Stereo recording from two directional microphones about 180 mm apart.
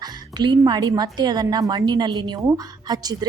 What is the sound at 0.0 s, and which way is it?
A woman's voice, 25° right (ahead or behind).